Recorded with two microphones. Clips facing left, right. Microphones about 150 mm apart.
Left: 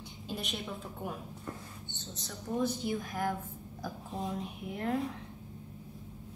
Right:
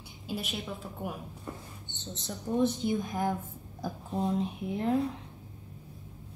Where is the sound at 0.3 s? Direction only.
Centre (ahead or behind).